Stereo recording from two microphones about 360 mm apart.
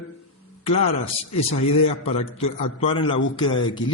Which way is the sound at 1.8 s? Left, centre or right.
Centre.